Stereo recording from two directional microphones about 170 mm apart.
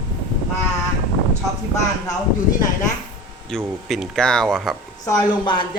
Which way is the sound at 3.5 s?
5° left (ahead or behind).